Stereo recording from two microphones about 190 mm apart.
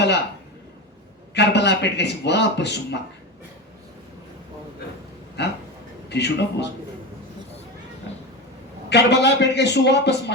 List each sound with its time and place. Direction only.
1.3 s a man's voice: 65° left (ahead or behind)
5.4 s a man's voice: 60° left (ahead or behind)
8.9 s a man's voice: 65° left (ahead or behind)